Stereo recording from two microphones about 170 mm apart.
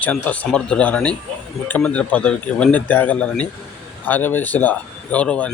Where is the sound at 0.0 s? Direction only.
10° left (ahead or behind).